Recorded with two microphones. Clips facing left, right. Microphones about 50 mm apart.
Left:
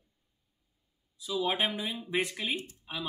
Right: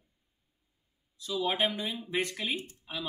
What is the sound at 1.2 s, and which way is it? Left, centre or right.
Speech, centre.